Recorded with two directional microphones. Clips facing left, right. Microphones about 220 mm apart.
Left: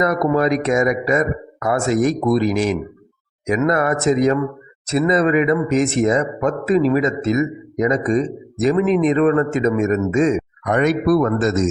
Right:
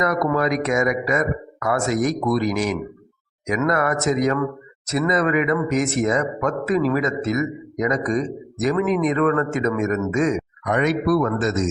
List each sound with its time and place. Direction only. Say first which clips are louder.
0.0 s speech: left 3 dB; 25° left (ahead or behind)
10.7 s speech: left 3 dB; 45° left (ahead or behind)